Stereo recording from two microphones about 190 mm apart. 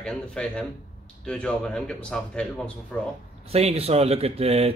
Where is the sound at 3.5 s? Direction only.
30° right (ahead or behind).